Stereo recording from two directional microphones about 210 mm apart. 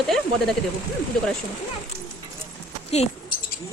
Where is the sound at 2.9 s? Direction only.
30° left (ahead or behind).